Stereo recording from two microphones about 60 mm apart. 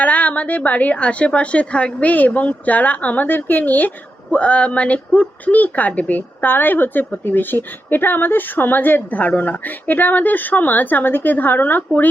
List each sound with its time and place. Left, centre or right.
0.0 s a woman's voice: left